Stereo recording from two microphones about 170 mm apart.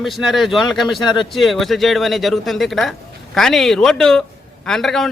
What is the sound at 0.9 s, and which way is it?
Speech, 25° left (ahead or behind).